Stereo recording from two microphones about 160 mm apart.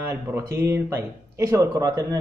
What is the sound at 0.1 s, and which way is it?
Speech, 20° right (ahead or behind).